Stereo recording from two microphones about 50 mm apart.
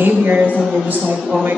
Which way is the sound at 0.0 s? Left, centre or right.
Right.